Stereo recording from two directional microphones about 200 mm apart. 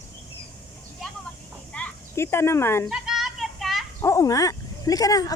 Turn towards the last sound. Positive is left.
turn(degrees=20)  # may be behind; listen again after turning